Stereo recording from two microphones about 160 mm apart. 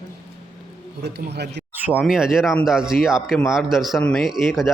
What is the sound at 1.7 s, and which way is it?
A man's voice, 10° right (ahead or behind).